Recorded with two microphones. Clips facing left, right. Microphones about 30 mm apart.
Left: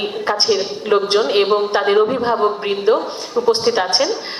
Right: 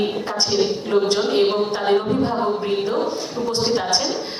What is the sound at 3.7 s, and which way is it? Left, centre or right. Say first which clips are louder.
Speech: left 4 dB; left.